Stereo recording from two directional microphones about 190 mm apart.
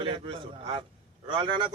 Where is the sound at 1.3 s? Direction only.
25° right (ahead or behind).